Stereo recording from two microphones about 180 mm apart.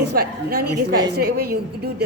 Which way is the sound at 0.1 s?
60° right (ahead or behind).